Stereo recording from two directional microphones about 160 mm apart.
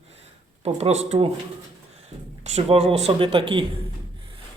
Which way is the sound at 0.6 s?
40° right (ahead or behind).